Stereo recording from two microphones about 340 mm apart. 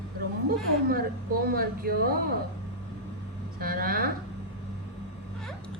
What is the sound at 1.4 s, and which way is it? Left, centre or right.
Speech, right.